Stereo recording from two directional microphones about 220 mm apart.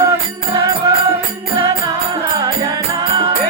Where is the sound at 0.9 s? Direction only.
15° right (ahead or behind).